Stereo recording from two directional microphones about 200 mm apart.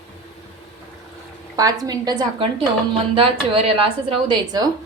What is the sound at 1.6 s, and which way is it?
A woman's voice, 20° right (ahead or behind).